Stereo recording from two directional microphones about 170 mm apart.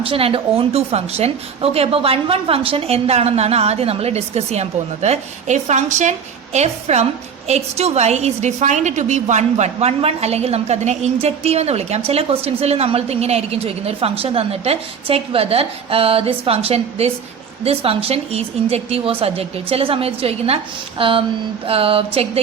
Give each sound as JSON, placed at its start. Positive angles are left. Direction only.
{"t": 0.0, "sound": "a woman's voice", "side_deg": -35}